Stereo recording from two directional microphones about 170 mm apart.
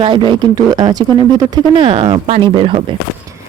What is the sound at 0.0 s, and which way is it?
Speech, 30° right (ahead or behind).